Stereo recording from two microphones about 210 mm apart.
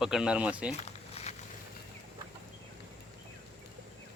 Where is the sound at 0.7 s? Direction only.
30° left (ahead or behind).